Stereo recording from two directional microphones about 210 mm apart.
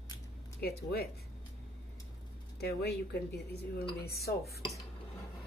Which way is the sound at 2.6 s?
50° left (ahead or behind).